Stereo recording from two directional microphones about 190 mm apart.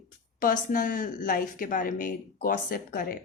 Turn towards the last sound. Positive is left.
turn(degrees=50)  # may be behind; listen again after turning